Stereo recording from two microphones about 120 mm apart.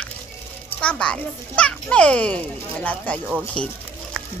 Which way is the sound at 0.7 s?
10° left (ahead or behind).